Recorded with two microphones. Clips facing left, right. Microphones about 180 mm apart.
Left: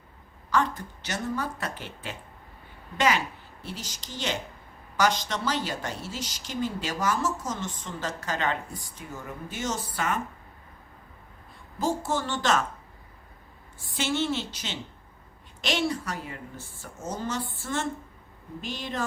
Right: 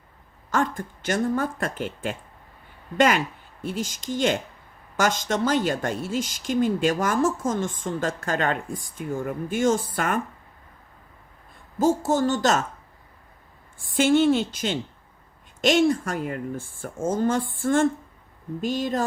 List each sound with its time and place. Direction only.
0.5 s a woman's voice: 50° right (ahead or behind)
3.6 s a woman's voice: 50° right (ahead or behind)
11.8 s a woman's voice: 45° right (ahead or behind)
13.7 s a woman's voice: 50° right (ahead or behind)